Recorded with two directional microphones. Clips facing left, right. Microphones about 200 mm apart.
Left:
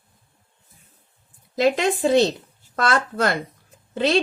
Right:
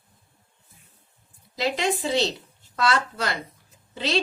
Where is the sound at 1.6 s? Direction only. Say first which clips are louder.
Left 6 dB; 50° left (ahead or behind).